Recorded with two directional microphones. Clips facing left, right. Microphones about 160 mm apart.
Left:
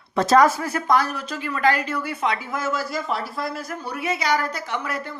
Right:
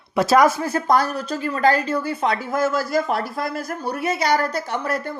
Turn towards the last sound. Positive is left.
turn(degrees=-40)  # may be behind; listen again after turning